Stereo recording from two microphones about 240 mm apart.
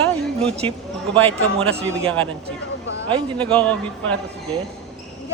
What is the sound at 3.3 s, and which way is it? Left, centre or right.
Speech, centre.